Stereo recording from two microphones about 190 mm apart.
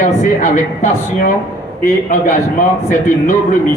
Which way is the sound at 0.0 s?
40° left (ahead or behind).